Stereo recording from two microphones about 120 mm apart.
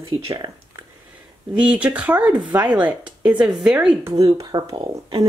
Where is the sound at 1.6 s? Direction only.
10° right (ahead or behind).